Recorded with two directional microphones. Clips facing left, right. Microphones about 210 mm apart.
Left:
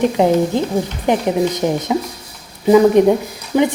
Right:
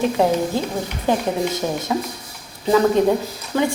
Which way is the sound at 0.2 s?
20° left (ahead or behind).